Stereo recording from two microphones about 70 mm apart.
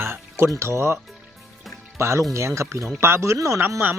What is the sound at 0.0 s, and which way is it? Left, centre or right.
Music, right.